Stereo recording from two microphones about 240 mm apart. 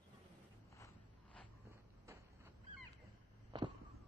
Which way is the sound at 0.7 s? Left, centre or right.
Centre.